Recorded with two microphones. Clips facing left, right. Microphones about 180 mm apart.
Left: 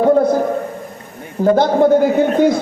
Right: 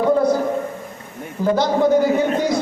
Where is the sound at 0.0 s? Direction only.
55° left (ahead or behind).